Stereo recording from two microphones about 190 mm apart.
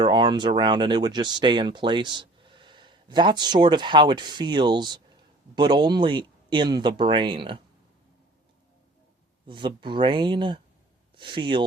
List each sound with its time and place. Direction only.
0.0 s speech: 25° right (ahead or behind)
9.5 s speech: 25° right (ahead or behind)